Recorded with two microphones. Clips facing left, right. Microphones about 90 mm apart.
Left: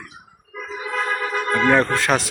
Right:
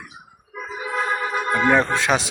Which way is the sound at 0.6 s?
10° right (ahead or behind).